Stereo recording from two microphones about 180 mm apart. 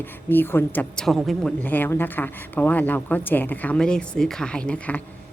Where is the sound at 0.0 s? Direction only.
10° left (ahead or behind).